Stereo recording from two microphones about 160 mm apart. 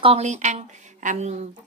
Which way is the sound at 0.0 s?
40° right (ahead or behind).